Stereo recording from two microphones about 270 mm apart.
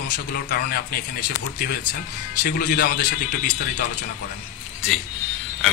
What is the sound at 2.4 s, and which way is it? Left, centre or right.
Speech, left.